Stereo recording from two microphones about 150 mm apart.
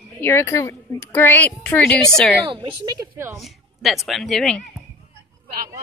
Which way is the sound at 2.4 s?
30° right (ahead or behind).